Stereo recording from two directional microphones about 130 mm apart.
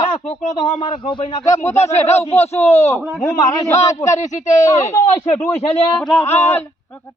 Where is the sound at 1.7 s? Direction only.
55° left (ahead or behind).